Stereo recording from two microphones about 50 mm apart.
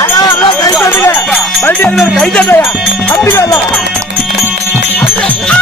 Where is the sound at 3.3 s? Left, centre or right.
Left.